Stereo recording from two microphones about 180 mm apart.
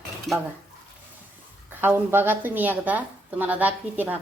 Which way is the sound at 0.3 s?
Centre (ahead or behind).